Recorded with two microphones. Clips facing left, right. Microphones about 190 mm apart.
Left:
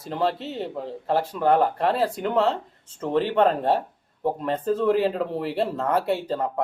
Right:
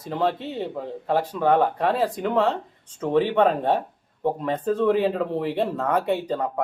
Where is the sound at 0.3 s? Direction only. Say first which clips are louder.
Right 1 dB; 15° right (ahead or behind).